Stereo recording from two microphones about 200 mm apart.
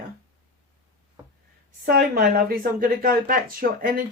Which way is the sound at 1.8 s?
50° right (ahead or behind).